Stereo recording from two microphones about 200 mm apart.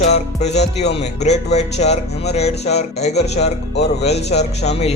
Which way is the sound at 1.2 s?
35° left (ahead or behind).